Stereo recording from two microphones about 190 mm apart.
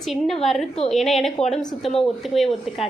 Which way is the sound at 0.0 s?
Centre (ahead or behind).